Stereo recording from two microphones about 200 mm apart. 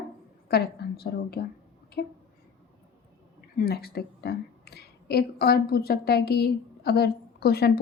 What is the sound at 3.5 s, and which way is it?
A woman's voice, 50° left (ahead or behind).